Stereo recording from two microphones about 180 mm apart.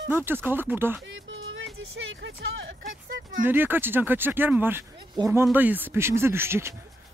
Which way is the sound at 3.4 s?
10° right (ahead or behind).